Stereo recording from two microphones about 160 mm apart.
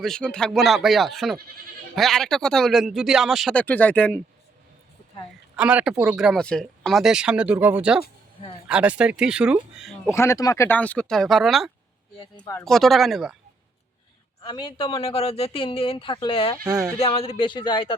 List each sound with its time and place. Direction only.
0.0 s speech: 5° left (ahead or behind)
3.5 s speech: 10° left (ahead or behind)
5.5 s speech: 5° right (ahead or behind)
10.1 s speech: 15° left (ahead or behind); by 13.3 s centre (ahead or behind)
14.4 s speech: 30° left (ahead or behind)
16.6 s speech: 5° right (ahead or behind)
17.0 s speech: 35° left (ahead or behind)